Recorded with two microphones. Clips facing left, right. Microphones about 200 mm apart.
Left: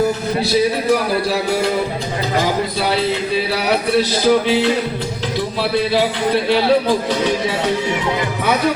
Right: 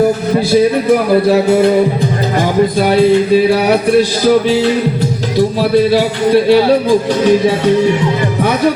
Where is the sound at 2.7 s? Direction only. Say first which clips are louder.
Right 9 dB; 50° right (ahead or behind).